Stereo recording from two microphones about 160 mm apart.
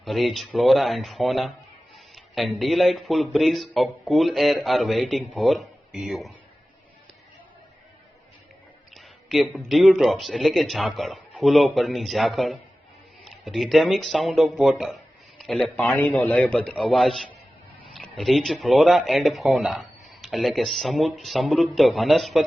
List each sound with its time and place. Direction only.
0.0 s speech: centre (ahead or behind)
9.0 s a man's voice: centre (ahead or behind)